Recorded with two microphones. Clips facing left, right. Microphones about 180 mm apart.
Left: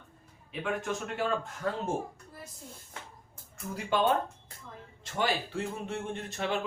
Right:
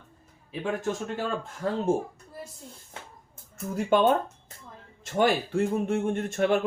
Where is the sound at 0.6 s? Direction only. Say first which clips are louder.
Right 4 dB; 30° right (ahead or behind).